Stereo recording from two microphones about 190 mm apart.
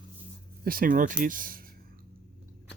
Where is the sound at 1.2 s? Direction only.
45° right (ahead or behind).